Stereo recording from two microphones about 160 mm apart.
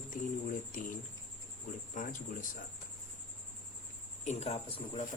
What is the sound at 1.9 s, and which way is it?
Speech, 55° left (ahead or behind).